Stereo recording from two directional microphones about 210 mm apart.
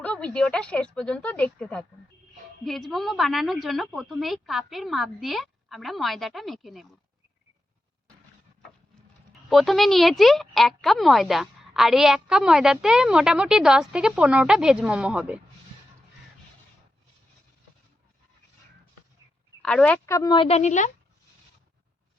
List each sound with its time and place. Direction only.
0.0 s speech: 5° left (ahead or behind)
9.5 s speech: centre (ahead or behind)
19.6 s speech: 5° left (ahead or behind); by 20.9 s 35° left (ahead or behind)